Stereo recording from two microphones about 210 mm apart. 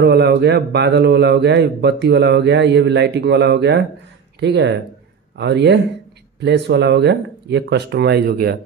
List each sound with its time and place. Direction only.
0.0 s speech: 55° right (ahead or behind)